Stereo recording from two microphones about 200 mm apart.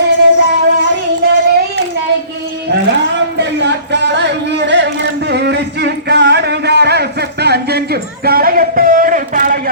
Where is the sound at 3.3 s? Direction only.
60° right (ahead or behind).